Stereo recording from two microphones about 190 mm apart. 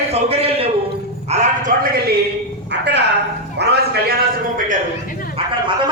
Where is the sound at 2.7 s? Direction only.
65° right (ahead or behind).